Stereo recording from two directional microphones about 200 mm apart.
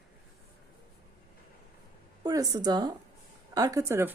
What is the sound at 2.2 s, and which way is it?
A woman's voice, 20° right (ahead or behind).